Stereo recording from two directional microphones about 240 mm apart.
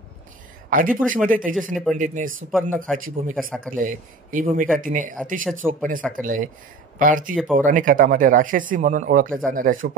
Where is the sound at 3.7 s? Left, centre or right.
Right.